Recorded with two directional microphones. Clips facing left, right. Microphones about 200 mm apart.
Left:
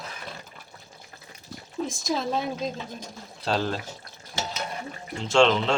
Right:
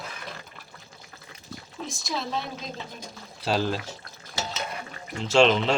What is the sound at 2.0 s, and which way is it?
Speech, 45° left (ahead or behind).